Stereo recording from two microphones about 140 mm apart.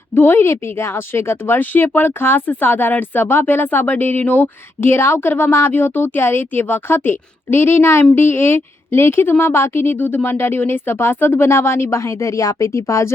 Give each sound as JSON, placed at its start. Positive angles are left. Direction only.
{"t": 0.1, "sound": "speech", "side_deg": 15}